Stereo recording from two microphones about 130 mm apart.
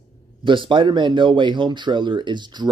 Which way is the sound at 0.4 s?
40° right (ahead or behind).